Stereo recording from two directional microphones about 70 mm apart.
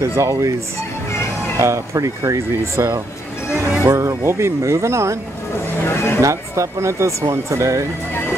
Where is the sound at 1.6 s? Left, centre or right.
Right.